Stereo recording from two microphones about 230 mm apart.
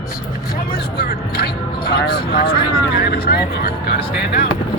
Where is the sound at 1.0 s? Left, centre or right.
Left.